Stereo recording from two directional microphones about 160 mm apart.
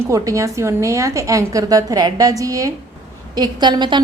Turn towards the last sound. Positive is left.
turn(degrees=-30)  # may be behind; listen again after turning